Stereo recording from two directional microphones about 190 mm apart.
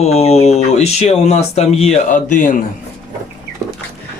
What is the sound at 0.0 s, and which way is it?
Speech, 35° left (ahead or behind).